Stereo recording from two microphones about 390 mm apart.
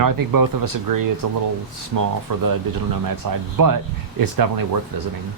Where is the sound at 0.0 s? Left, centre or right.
Right.